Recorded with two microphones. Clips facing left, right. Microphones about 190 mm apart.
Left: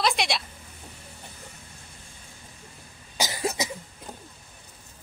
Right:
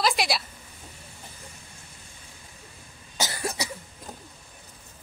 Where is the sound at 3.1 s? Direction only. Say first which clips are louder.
Left 2 dB; 15° left (ahead or behind).